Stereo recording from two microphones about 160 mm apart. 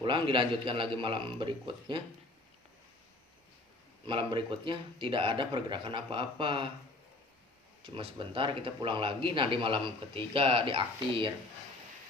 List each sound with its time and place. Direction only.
0.0 s speech: 30° right (ahead or behind)
4.0 s speech: 30° right (ahead or behind)
7.9 s speech: 35° right (ahead or behind)